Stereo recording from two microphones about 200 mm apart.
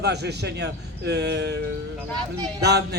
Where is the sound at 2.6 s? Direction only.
55° right (ahead or behind).